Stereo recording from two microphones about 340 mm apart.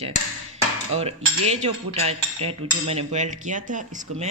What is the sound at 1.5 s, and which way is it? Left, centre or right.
Speech, centre.